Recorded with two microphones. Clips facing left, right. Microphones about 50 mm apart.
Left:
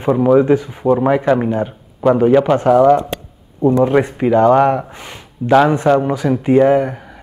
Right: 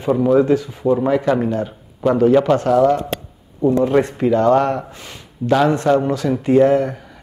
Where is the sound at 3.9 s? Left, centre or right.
Centre.